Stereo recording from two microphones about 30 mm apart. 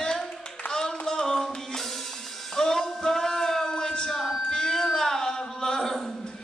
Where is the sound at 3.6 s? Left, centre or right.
Left.